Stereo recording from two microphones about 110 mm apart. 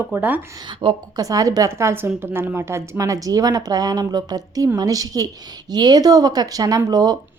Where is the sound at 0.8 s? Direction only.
45° right (ahead or behind).